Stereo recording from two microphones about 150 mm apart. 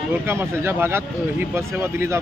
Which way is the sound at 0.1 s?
15° right (ahead or behind).